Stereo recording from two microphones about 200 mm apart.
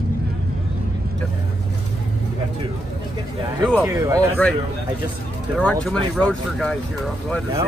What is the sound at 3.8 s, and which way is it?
Speech, 15° right (ahead or behind).